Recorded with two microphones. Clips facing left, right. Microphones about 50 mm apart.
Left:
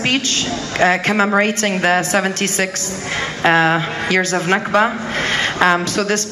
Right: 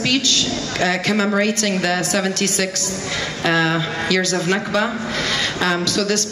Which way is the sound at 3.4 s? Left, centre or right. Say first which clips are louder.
Left 4 dB; left.